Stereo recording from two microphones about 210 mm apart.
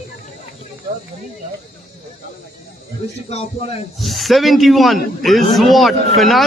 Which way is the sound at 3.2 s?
30° left (ahead or behind).